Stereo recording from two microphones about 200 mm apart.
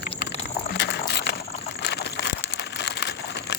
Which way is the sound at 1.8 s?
60° left (ahead or behind).